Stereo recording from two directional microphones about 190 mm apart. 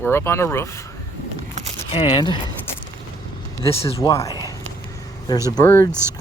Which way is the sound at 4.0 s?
15° left (ahead or behind).